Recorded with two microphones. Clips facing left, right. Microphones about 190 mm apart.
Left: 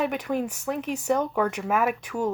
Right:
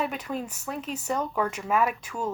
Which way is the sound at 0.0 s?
65° left (ahead or behind).